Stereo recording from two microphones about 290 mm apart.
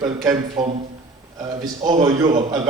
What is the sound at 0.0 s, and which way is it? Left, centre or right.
Speech, centre.